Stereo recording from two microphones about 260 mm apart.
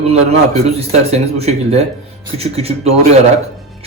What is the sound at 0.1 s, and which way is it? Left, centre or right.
Speech, right.